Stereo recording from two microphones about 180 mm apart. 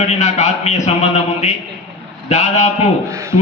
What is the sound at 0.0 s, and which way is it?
A man's voice, 40° left (ahead or behind).